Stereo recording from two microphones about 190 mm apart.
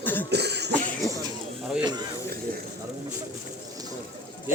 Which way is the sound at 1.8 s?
20° right (ahead or behind).